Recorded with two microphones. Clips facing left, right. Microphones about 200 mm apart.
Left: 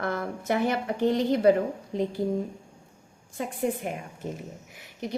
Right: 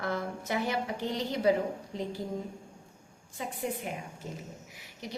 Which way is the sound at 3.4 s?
55° left (ahead or behind).